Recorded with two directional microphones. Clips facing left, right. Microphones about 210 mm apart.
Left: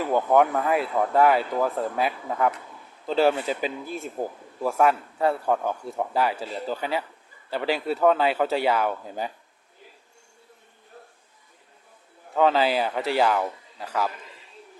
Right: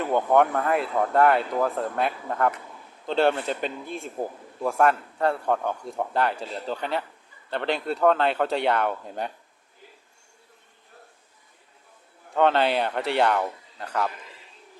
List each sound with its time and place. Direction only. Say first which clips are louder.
0.0 s speech: even; 5° left (ahead or behind)
12.3 s speech: even; centre (ahead or behind)